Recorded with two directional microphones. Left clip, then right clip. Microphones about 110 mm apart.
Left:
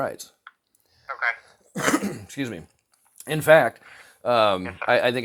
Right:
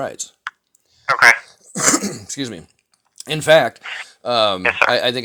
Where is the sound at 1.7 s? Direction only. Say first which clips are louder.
Right 5 dB; 15° right (ahead or behind).